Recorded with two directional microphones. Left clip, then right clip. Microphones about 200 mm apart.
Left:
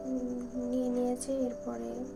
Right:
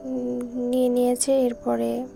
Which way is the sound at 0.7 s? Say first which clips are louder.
Right 11 dB; 50° right (ahead or behind).